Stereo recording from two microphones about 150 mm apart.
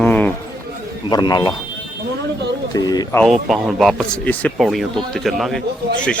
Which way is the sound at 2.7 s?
25° left (ahead or behind).